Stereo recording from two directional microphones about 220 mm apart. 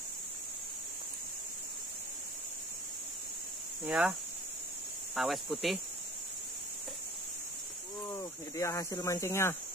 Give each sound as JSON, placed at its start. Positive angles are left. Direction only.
{"t": 3.8, "sound": "speech", "side_deg": 0}
{"t": 8.0, "sound": "speech", "side_deg": 20}